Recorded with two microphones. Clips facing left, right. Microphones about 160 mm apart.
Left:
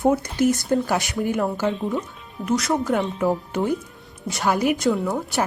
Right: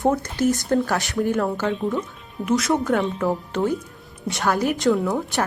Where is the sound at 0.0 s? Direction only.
10° left (ahead or behind).